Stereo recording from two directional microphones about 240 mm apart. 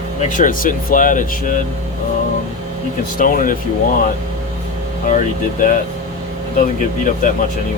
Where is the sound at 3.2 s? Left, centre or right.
Left.